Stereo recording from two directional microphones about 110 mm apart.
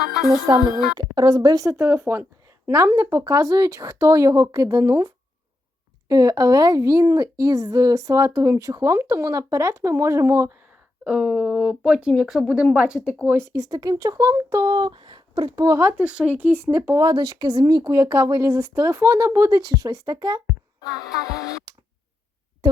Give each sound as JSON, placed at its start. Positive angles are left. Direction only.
{"t": 0.9, "sound": "a woman's voice", "side_deg": -40}
{"t": 11.0, "sound": "speech", "side_deg": -10}
{"t": 13.3, "sound": "a woman's voice", "side_deg": -25}
{"t": 13.7, "sound": "speech", "side_deg": -40}
{"t": 16.0, "sound": "a woman's voice", "side_deg": -10}
{"t": 21.3, "sound": "speech", "side_deg": 35}